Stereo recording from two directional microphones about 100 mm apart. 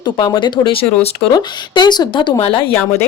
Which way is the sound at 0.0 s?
45° left (ahead or behind).